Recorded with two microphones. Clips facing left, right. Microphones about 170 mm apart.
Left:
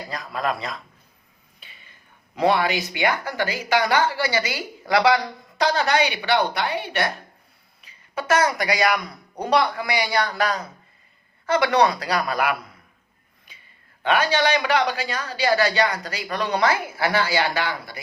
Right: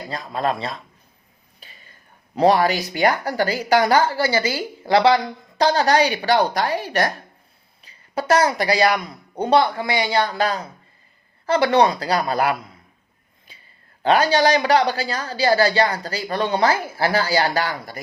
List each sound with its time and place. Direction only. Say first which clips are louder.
0.1 s a woman's voice: right 3 dB; 30° right (ahead or behind)
13.5 s a sound: right 2 dB; 30° right (ahead or behind)
14.0 s a woman's voice: right 4 dB; 35° right (ahead or behind)